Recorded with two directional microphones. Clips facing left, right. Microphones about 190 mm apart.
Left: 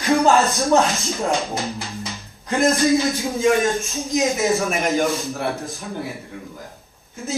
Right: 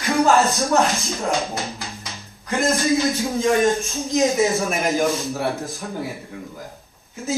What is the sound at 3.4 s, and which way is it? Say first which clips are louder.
A man's voice: even; centre (ahead or behind).